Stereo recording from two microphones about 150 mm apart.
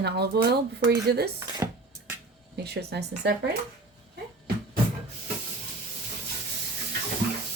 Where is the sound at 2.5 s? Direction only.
90° right.